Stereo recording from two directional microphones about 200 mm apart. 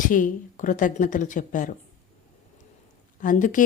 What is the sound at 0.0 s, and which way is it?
Speech, 40° left (ahead or behind).